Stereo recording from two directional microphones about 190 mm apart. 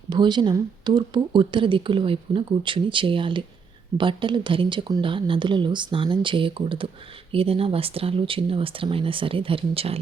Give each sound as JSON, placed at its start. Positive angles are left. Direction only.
{"t": 0.1, "sound": "speech", "side_deg": -25}